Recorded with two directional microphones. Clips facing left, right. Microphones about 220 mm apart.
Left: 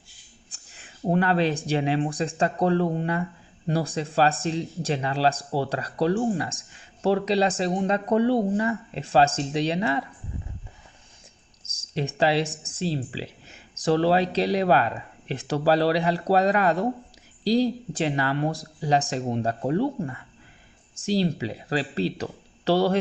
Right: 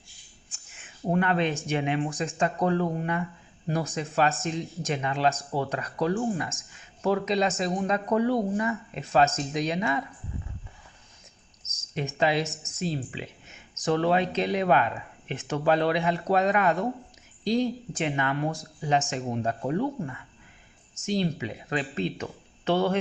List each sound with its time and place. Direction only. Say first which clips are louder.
0.5 s speech: left 2 dB; 35° left (ahead or behind)
11.6 s speech: left 3 dB; 30° left (ahead or behind)